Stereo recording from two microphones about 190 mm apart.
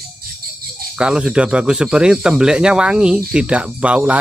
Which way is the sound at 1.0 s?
5° right (ahead or behind).